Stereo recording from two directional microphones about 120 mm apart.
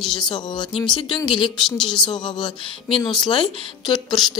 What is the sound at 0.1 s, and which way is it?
Speech, 40° left (ahead or behind).